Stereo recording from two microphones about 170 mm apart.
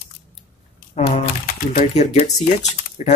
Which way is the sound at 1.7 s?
40° left (ahead or behind).